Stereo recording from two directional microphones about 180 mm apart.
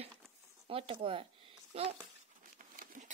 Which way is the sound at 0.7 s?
30° right (ahead or behind).